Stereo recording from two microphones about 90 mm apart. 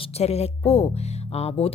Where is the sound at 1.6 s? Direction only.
90° left.